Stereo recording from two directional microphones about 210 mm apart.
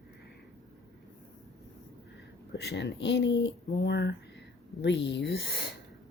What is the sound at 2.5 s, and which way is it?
Speech, 50° left (ahead or behind).